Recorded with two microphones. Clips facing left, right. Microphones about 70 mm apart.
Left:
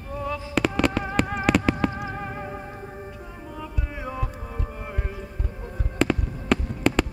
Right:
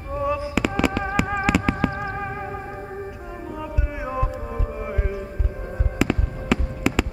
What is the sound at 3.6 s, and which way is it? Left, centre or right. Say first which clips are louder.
Music: right 2 dB; centre.